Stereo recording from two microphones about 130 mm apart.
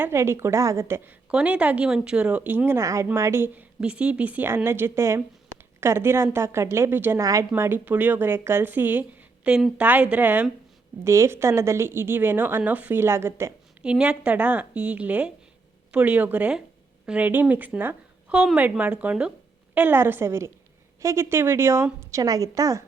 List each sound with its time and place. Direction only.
0.0 s a woman's voice: 20° right (ahead or behind)
1.3 s a woman's voice: 10° right (ahead or behind)
13.8 s a woman's voice: 10° right (ahead or behind); by 22.8 s 25° right (ahead or behind)